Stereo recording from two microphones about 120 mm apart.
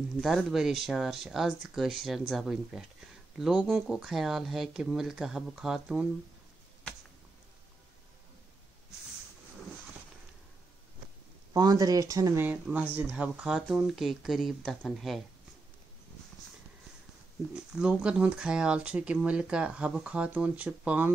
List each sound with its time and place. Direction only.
0.2 s speech: centre (ahead or behind)
11.5 s speech: 30° right (ahead or behind)
12.4 s speech: 10° right (ahead or behind)
17.6 s speech: 10° right (ahead or behind)